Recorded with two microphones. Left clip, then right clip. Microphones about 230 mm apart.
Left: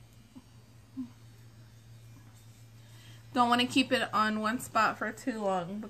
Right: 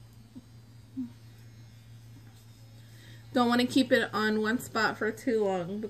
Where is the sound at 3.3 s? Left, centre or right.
Centre.